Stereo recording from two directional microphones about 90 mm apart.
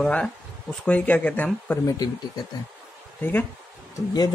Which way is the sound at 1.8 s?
45° left (ahead or behind).